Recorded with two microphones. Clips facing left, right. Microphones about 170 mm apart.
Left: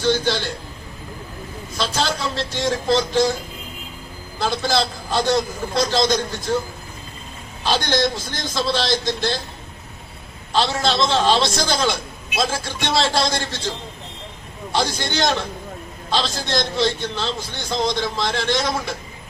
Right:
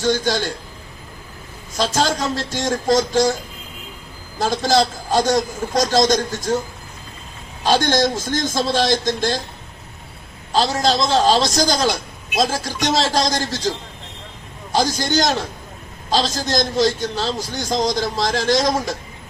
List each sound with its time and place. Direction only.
0.0 s a man's voice: 45° right (ahead or behind)
1.7 s a man's voice: 45° right (ahead or behind)
4.4 s a man's voice: 40° right (ahead or behind)
7.6 s a man's voice: 45° right (ahead or behind)
10.5 s a man's voice: 40° right (ahead or behind)